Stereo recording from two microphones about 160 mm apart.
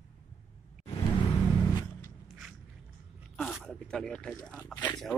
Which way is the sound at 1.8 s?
20° left (ahead or behind).